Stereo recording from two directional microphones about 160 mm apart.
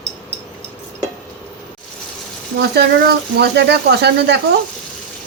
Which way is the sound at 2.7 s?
90° right.